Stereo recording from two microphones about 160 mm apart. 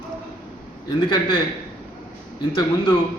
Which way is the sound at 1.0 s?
25° left (ahead or behind).